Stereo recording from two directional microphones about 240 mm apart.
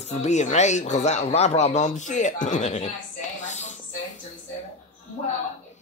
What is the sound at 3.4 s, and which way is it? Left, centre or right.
Music, left.